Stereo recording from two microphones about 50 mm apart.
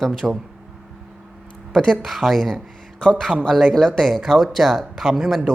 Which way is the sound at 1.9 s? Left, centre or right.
Centre.